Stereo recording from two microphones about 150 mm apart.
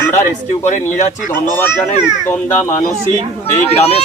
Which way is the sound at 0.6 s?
55° left (ahead or behind).